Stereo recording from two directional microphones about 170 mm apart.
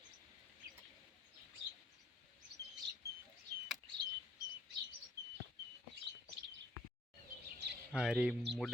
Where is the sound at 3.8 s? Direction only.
30° right (ahead or behind).